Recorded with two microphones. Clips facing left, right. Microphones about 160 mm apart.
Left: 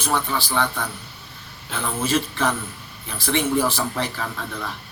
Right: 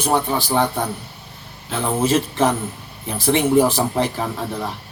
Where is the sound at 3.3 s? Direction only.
30° right (ahead or behind).